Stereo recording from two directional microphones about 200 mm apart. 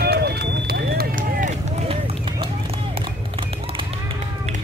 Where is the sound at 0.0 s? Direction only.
55° right (ahead or behind); by 3.8 s 25° right (ahead or behind).